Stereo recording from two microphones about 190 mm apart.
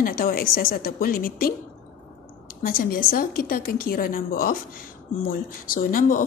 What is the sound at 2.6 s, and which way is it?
Speech, 50° left (ahead or behind).